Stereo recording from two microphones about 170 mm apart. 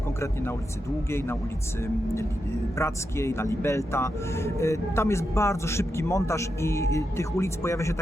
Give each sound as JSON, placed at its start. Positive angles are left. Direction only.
{"t": 2.7, "sound": "speech", "side_deg": 15}